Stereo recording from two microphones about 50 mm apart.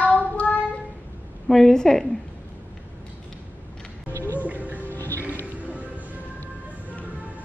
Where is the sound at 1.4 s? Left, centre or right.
Centre.